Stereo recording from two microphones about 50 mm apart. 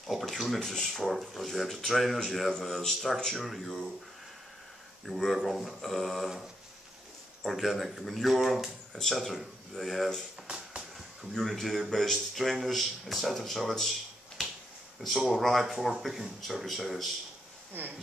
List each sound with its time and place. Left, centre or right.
0.1 s speech: centre
0.6 s speech: centre
5.0 s speech: centre
7.4 s speech: centre
10.4 s a sound: right
11.3 s speech: centre
15.0 s speech: centre
17.8 s speech: right